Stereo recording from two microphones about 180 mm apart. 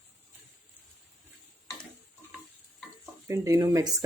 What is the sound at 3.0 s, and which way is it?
Speech, 15° right (ahead or behind).